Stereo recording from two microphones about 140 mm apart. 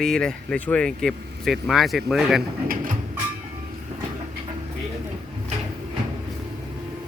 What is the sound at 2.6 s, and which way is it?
Bird, 85° right.